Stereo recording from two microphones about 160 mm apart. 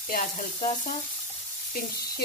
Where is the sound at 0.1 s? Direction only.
55° left (ahead or behind).